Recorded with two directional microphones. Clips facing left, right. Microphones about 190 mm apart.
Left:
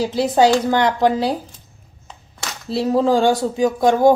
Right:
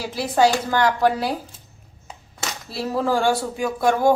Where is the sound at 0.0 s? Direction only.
20° left (ahead or behind).